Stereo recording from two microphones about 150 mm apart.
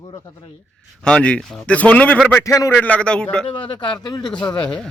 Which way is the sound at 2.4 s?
20° left (ahead or behind).